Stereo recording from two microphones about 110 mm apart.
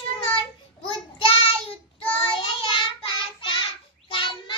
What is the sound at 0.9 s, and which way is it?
Child singing, 55° left (ahead or behind).